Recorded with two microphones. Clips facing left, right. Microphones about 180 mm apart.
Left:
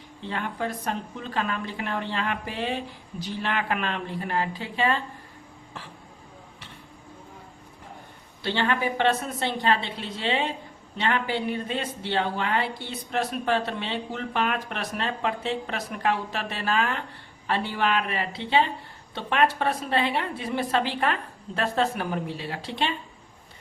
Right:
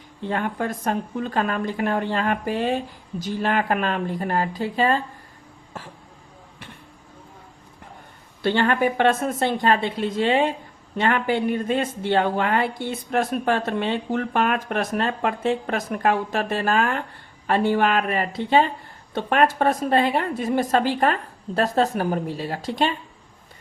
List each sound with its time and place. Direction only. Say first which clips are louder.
0.3 s speech: right 5 dB; 50° right (ahead or behind)
8.4 s speech: right 6 dB; 50° right (ahead or behind)